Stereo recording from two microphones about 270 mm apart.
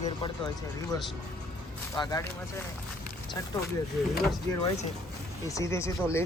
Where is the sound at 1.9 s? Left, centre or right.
Centre.